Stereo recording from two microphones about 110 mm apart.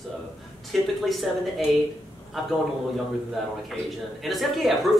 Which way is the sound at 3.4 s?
Centre (ahead or behind).